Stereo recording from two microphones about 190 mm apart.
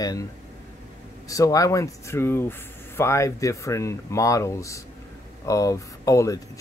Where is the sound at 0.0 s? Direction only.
20° left (ahead or behind).